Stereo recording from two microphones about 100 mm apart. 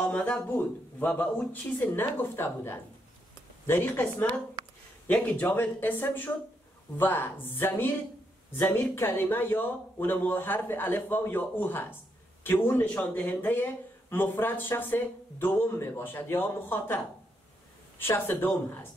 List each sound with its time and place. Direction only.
0.0 s a man's voice: 15° left (ahead or behind)